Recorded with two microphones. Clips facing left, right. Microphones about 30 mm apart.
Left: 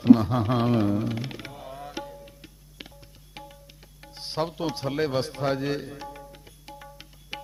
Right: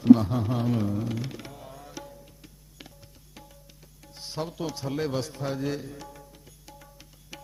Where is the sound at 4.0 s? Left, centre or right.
Left.